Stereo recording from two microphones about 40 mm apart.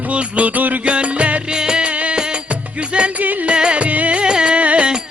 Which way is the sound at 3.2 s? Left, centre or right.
Right.